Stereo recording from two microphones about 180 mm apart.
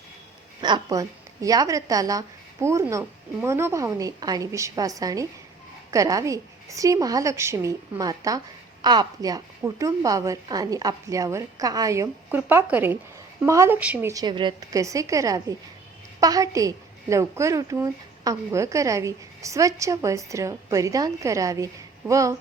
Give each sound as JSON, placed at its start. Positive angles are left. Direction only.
{"t": 0.6, "sound": "a woman's voice", "side_deg": -20}